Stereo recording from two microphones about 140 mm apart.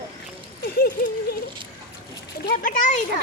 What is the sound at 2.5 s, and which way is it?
Speech, 75° left (ahead or behind).